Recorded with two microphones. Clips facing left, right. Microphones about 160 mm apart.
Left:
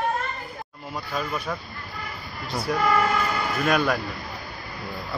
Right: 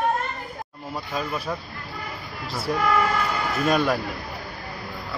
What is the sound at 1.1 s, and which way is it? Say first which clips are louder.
Speech: even; 5° right (ahead or behind).